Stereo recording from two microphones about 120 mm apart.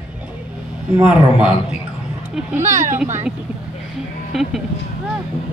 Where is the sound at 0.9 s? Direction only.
10° right (ahead or behind).